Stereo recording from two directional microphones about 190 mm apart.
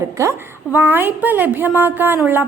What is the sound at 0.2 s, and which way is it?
A woman's voice, 10° right (ahead or behind).